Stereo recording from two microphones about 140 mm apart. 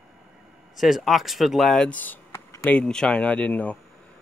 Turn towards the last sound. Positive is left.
turn(degrees=10)  # may be behind; listen again after turning